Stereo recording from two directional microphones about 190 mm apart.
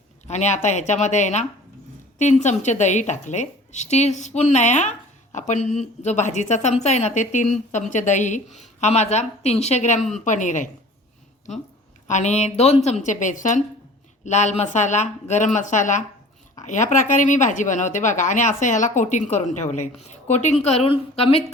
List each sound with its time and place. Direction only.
0.3 s a woman's voice: 35° left (ahead or behind)
10.0 s a woman's voice: centre (ahead or behind)
10.2 s a woman's voice: 40° left (ahead or behind)
12.0 s a woman's voice: 40° left (ahead or behind)